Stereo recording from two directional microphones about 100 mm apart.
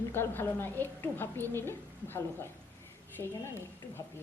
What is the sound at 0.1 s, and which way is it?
Speech, 20° left (ahead or behind).